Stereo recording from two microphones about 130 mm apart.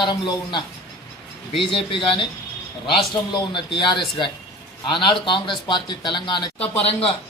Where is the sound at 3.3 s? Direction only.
35° left (ahead or behind).